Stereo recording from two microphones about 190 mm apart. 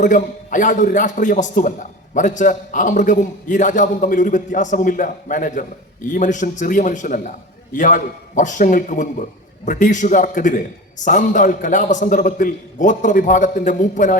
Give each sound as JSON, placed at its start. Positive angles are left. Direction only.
{"t": 0.0, "sound": "a man's voice", "side_deg": 40}